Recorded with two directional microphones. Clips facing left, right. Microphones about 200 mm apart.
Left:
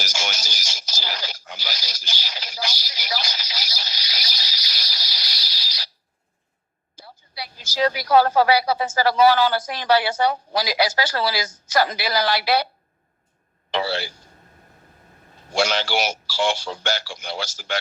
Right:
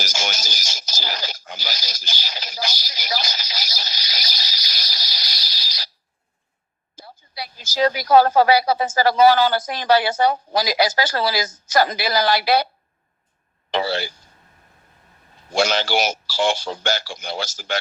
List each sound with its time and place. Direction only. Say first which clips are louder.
0.0 s radio: right 2 dB; 45° right (ahead or behind)
6.9 s a woman's voice: right 2 dB; 45° right (ahead or behind)
13.7 s speech: right 2 dB; 45° right (ahead or behind)
15.5 s a man's voice: right 2 dB; 45° right (ahead or behind)